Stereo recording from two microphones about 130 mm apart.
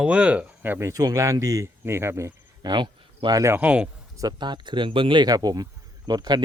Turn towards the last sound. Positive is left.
turn(degrees=-30)  # may be behind; listen again after turning